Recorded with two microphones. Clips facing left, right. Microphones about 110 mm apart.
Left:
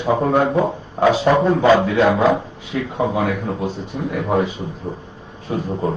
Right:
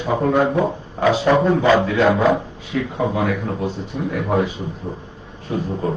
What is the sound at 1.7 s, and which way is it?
Speech, 15° left (ahead or behind).